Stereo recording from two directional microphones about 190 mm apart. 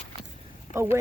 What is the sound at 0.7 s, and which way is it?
Speech, 15° right (ahead or behind).